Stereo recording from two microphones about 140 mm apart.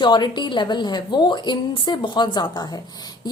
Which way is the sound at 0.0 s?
30° left (ahead or behind).